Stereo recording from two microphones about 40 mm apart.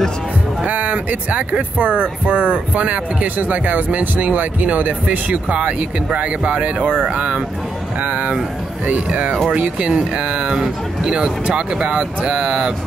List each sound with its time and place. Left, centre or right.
0.7 s speech: right; by 12.7 s centre